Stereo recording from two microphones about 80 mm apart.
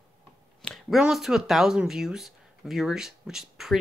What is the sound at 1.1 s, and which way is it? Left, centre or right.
Speech, centre.